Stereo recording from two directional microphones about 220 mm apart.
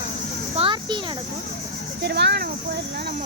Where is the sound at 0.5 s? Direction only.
25° right (ahead or behind).